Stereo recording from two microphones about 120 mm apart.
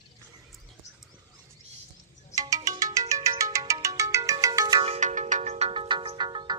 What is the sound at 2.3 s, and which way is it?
Music, 30° right (ahead or behind).